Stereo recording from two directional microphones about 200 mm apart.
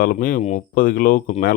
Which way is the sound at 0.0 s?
45° left (ahead or behind).